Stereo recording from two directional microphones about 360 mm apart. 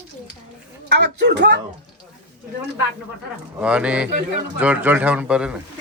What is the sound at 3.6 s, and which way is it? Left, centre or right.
A man's voice, centre.